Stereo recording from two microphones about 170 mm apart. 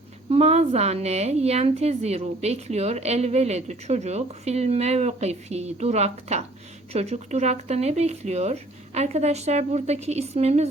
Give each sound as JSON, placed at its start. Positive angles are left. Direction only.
{"t": 0.3, "sound": "a woman's voice", "side_deg": -40}